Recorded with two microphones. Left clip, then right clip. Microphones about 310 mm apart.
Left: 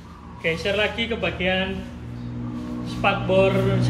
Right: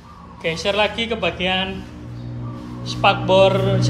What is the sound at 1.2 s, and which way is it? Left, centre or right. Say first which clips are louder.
Speech: right 3 dB; centre.